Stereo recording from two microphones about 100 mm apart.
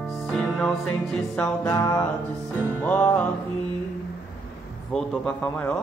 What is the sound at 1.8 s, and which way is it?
Mantra, 30° left (ahead or behind).